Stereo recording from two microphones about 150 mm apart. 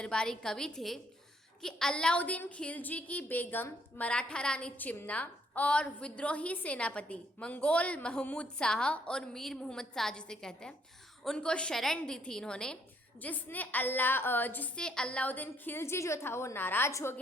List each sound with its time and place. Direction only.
0.0 s a woman's voice: 5° left (ahead or behind)